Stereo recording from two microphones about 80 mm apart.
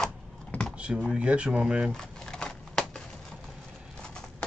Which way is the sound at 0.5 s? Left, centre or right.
Centre.